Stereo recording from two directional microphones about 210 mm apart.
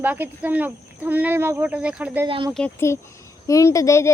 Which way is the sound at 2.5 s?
10° left (ahead or behind).